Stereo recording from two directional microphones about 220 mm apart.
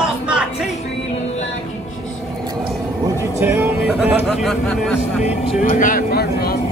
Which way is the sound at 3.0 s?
10° right (ahead or behind).